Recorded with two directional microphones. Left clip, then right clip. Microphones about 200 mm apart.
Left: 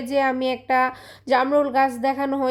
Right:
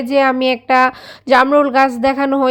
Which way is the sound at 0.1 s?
20° right (ahead or behind).